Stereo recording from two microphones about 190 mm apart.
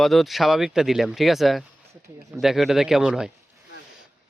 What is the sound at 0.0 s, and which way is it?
Speech, centre (ahead or behind).